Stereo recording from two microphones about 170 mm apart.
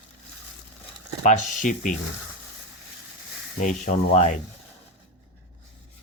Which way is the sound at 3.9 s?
45° left (ahead or behind).